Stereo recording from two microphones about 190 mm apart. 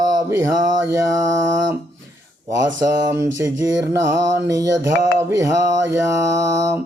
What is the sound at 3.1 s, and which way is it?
Mantra, 15° right (ahead or behind).